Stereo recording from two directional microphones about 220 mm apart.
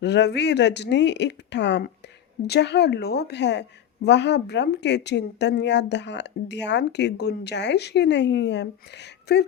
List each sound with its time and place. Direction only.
0.0 s a woman's voice: 50° left (ahead or behind)